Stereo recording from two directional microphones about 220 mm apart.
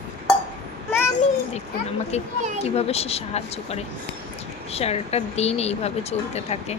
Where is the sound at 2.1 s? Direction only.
30° left (ahead or behind).